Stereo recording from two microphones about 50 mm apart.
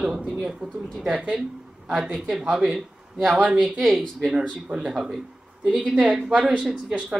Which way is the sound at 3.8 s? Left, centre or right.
Centre.